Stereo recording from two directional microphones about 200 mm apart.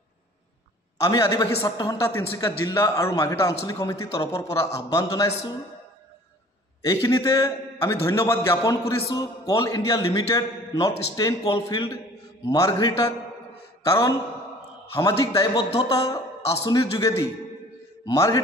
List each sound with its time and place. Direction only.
1.0 s a man's voice: 20° left (ahead or behind)
6.9 s a man's voice: 15° left (ahead or behind)